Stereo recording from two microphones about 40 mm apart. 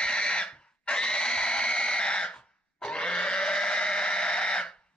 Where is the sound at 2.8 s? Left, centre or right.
Left.